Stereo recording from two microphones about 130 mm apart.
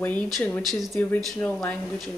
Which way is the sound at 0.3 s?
5° left (ahead or behind).